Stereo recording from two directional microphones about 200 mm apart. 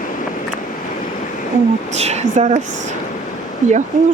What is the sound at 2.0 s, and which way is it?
Speech, 35° right (ahead or behind).